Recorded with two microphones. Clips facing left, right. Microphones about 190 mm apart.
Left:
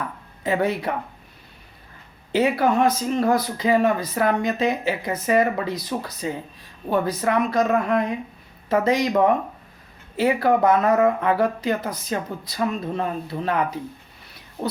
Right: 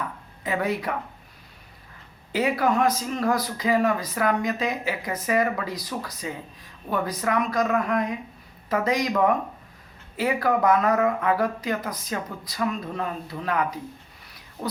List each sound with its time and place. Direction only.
0.4 s speech: 30° left (ahead or behind)
2.3 s speech: 25° left (ahead or behind)